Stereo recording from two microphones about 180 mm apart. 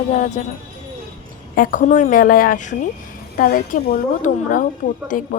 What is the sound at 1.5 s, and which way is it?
A woman's voice, 50° left (ahead or behind).